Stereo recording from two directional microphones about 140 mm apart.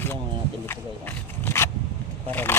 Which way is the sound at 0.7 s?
15° left (ahead or behind).